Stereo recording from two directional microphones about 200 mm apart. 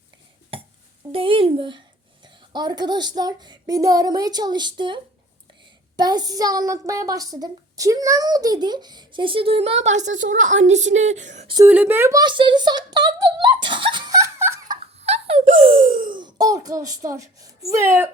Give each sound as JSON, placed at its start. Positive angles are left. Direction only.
{"t": 0.5, "sound": "burping", "side_deg": -30}
{"t": 1.1, "sound": "a child's voice", "side_deg": -25}
{"t": 6.0, "sound": "a child's voice", "side_deg": -20}
{"t": 11.5, "sound": "speech", "side_deg": -10}
{"t": 14.9, "sound": "giggle", "side_deg": -30}
{"t": 16.1, "sound": "speech", "side_deg": -20}